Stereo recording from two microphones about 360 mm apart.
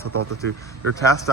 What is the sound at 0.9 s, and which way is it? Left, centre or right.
Speech, centre.